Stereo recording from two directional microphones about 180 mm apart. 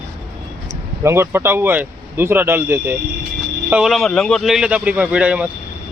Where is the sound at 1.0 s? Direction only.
15° right (ahead or behind).